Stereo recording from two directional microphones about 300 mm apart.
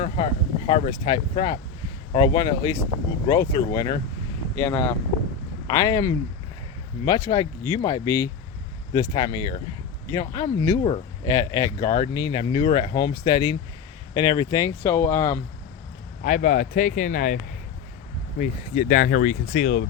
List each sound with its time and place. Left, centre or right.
0.0 s speech: centre
16.2 s speech: left